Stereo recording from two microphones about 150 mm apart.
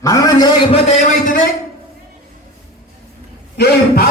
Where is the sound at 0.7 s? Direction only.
40° left (ahead or behind).